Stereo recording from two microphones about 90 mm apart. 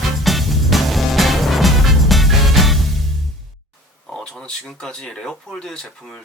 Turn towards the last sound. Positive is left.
turn(degrees=5)  # may be behind; listen again after turning